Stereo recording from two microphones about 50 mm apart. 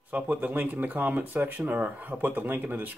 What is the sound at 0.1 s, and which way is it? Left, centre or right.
Speech, right.